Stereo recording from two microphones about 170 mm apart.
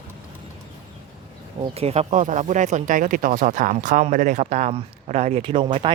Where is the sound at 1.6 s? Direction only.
35° right (ahead or behind).